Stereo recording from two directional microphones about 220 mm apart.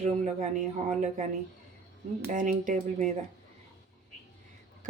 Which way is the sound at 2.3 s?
35° right (ahead or behind).